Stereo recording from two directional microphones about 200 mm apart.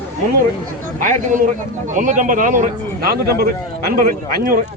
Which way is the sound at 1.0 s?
40° right (ahead or behind).